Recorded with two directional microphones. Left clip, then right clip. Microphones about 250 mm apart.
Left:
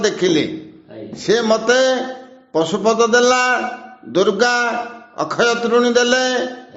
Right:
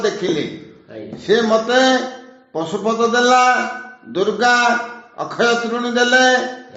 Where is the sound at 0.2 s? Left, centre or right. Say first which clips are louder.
Left 4 dB; left.